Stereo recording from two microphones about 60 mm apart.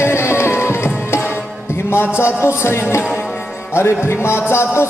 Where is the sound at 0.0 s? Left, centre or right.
Left.